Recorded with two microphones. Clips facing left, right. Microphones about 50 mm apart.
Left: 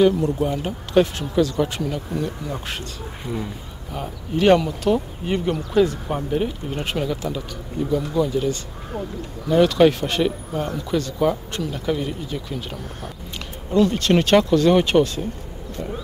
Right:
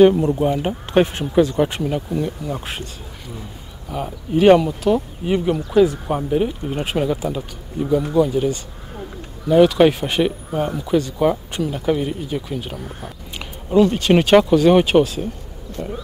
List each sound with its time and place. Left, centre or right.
0.0 s speech: right
2.5 s speech: centre
2.8 s speech: left
3.9 s speech: centre
15.8 s a sound: centre